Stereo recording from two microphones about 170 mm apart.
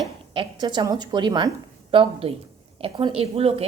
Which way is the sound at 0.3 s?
25° right (ahead or behind).